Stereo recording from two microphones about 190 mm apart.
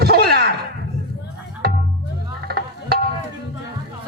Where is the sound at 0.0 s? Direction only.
55° right (ahead or behind).